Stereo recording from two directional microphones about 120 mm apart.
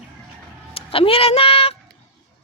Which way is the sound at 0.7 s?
50° left (ahead or behind).